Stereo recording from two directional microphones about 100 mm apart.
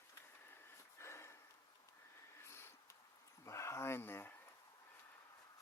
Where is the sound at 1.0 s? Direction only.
25° left (ahead or behind).